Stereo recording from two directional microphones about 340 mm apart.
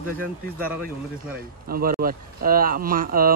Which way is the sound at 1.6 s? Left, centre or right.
Right.